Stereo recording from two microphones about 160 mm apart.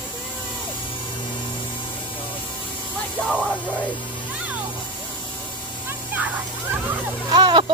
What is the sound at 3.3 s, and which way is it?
Speech, 10° left (ahead or behind).